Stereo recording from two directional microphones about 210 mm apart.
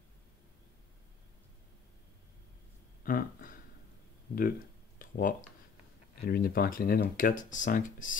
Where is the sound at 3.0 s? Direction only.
40° left (ahead or behind).